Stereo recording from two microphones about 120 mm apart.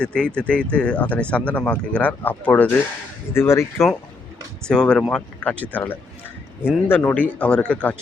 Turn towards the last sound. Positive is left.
turn(degrees=10)  # may be behind; listen again after turning